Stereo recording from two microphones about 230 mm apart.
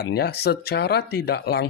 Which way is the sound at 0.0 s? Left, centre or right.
Left.